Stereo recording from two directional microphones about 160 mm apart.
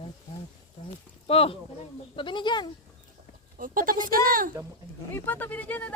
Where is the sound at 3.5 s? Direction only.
60° right (ahead or behind).